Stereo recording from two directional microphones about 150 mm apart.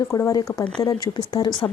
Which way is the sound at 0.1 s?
20° left (ahead or behind).